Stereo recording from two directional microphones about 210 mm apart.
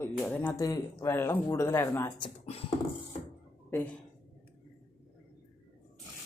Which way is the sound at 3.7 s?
10° left (ahead or behind).